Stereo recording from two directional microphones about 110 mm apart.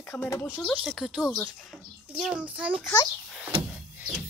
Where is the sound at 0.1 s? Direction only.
15° left (ahead or behind).